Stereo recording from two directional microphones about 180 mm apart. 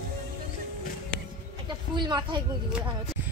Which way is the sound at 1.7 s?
25° right (ahead or behind).